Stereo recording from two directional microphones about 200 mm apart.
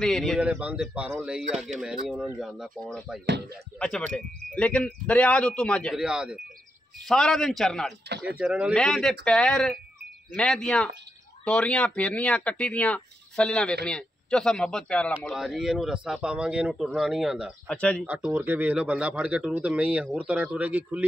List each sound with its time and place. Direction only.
0.0 s speech: centre (ahead or behind)
3.3 s speech: 55° right (ahead or behind)
4.6 s speech: 5° left (ahead or behind)
18.0 s speech: 10° right (ahead or behind)